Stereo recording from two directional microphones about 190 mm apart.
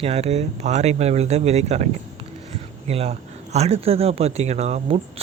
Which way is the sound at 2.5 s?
35° right (ahead or behind).